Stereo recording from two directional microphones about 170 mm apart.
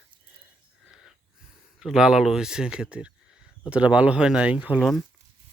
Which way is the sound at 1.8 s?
5° right (ahead or behind).